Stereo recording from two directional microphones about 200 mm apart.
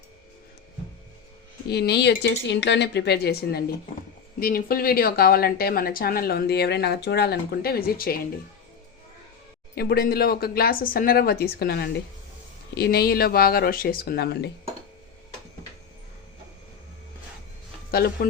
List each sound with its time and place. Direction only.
1.6 s a woman's voice: 55° left (ahead or behind)
9.7 s a woman's voice: 50° left (ahead or behind)
17.9 s a woman's voice: 50° left (ahead or behind)